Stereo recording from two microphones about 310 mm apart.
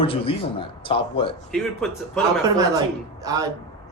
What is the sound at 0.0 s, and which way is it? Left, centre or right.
A man's voice, centre.